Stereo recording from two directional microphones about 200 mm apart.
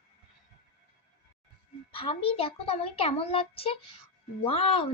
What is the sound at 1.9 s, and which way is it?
A woman's voice, 25° left (ahead or behind).